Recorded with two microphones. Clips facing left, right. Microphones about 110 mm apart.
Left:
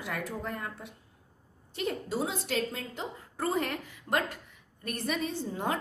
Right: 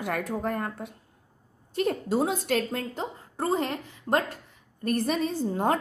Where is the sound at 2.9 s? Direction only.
35° right (ahead or behind).